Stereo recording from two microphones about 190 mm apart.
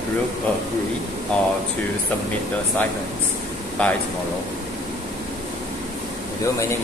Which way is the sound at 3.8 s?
5° left (ahead or behind).